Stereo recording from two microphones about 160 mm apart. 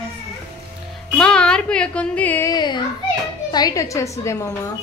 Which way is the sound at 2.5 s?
25° left (ahead or behind).